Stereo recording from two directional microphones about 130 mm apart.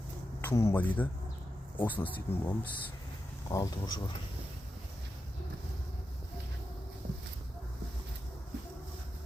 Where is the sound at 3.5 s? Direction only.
30° left (ahead or behind).